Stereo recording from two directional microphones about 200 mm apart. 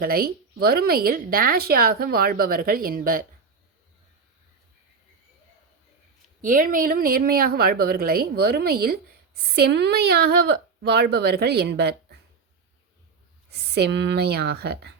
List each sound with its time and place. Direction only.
0.0 s speech: 50° right (ahead or behind)
6.4 s speech: 45° right (ahead or behind)
13.5 s speech: 55° right (ahead or behind)